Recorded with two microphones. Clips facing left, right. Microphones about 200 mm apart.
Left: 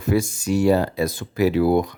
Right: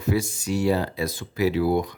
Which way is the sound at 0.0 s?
50° left (ahead or behind).